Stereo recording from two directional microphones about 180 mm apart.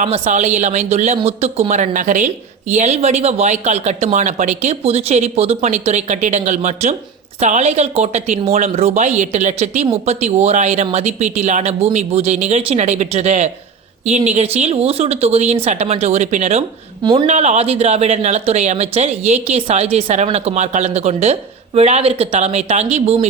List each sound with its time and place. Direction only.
0.0 s a woman's voice: 40° right (ahead or behind)
17.0 s speech: 25° right (ahead or behind)
17.2 s a woman's voice: 40° right (ahead or behind)